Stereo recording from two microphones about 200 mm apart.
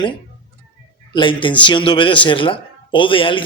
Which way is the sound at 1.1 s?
25° left (ahead or behind).